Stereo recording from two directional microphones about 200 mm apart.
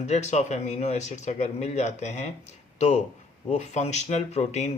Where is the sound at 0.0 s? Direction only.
35° left (ahead or behind).